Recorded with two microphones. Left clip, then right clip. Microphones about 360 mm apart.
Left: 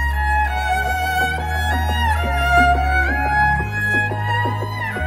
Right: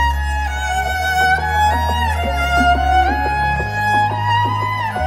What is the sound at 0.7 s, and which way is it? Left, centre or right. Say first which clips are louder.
Music: right 5 dB; right.